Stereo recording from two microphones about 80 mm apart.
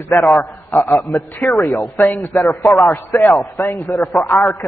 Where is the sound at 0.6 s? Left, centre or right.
Left.